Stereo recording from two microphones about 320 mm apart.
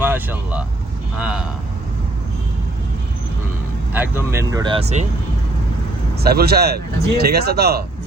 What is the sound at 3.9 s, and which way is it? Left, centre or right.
Speech, centre.